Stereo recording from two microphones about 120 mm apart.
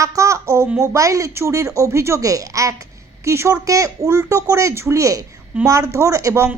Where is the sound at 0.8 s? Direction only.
25° right (ahead or behind).